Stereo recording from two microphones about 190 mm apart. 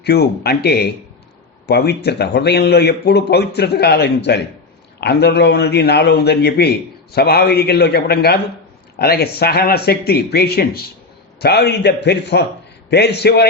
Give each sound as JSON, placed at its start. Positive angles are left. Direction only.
{"t": 0.0, "sound": "a man's voice", "side_deg": 60}